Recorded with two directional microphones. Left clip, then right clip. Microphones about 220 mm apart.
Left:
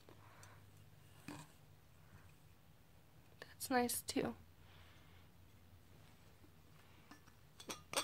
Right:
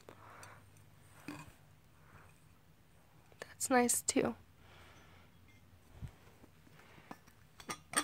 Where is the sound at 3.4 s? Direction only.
35° right (ahead or behind).